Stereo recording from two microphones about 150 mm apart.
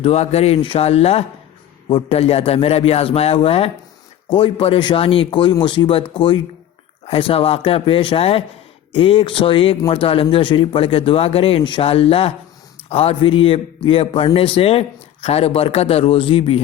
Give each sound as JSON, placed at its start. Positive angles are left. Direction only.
{"t": 0.0, "sound": "a man's voice", "side_deg": 45}